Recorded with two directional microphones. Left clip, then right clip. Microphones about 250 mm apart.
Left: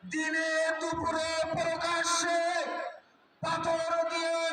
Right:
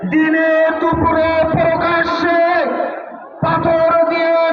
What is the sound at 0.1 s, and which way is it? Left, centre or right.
Music, left.